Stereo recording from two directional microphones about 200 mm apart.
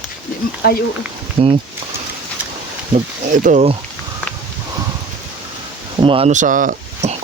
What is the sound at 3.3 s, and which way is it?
Speech, 40° right (ahead or behind).